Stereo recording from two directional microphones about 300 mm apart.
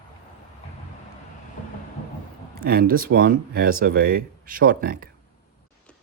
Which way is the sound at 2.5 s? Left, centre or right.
Right.